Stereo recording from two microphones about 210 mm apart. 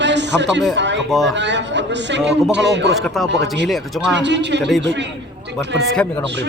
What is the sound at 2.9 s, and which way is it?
Speech, centre (ahead or behind).